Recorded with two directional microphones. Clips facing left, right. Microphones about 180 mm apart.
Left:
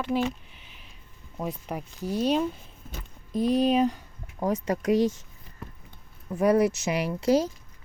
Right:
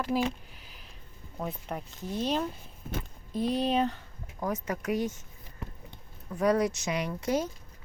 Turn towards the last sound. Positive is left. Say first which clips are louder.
# left 6 dB
turn(degrees=30)  # may be behind; listen again after turning